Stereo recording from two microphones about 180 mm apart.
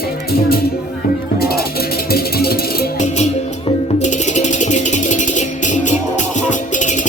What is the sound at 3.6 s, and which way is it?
Music, 40° left (ahead or behind).